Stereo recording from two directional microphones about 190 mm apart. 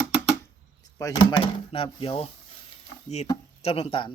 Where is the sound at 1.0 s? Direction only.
25° left (ahead or behind).